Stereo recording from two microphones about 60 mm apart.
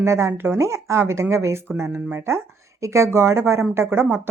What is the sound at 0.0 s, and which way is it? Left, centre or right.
Speech, right.